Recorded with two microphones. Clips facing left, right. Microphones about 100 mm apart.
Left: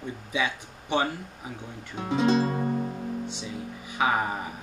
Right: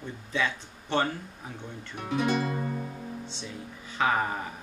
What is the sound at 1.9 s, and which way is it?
Music, 25° left (ahead or behind).